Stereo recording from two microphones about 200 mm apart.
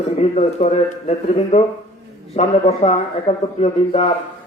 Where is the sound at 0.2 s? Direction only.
35° left (ahead or behind).